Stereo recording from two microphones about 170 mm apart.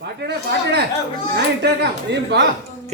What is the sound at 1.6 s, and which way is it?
Speech, 90° right.